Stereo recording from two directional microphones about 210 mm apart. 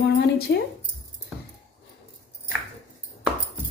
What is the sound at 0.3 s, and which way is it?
Speech, 50° left (ahead or behind).